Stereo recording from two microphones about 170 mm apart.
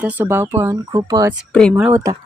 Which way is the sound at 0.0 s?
10° right (ahead or behind).